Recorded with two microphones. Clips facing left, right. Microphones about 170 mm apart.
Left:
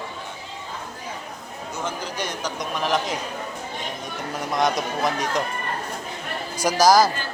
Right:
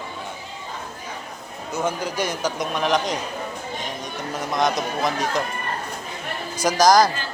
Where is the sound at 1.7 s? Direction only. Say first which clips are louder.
Right 5 dB; 10° right (ahead or behind).